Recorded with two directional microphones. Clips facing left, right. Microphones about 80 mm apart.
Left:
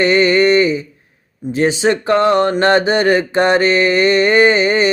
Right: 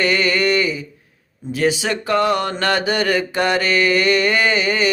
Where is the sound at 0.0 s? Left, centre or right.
Left.